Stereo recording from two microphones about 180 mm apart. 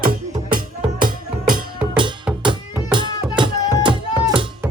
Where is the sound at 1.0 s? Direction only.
50° right (ahead or behind).